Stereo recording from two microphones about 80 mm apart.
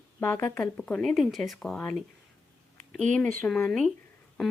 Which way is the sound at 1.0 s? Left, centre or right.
Centre.